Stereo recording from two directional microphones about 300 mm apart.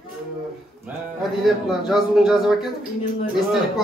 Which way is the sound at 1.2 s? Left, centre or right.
Centre.